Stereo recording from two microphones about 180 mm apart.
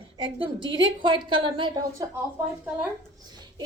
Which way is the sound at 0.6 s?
25° right (ahead or behind).